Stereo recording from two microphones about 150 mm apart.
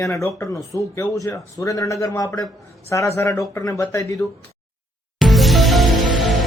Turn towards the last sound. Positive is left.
turn(degrees=0)  # may be behind; listen again after turning